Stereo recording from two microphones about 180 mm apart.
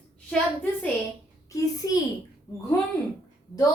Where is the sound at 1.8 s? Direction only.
20° left (ahead or behind).